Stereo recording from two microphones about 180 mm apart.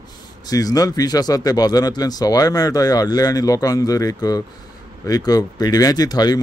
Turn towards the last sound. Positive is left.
turn(degrees=20)  # may be behind; listen again after turning